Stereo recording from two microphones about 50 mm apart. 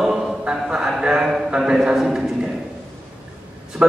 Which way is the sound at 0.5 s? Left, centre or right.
Centre.